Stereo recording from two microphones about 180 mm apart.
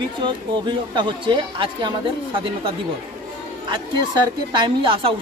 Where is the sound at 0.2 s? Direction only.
25° right (ahead or behind).